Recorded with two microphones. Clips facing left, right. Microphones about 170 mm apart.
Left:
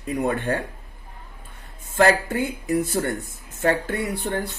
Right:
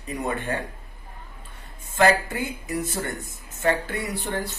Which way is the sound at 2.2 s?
55° left (ahead or behind).